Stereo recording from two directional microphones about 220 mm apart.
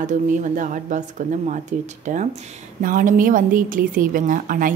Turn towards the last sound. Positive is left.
turn(degrees=-40)  # may be behind; listen again after turning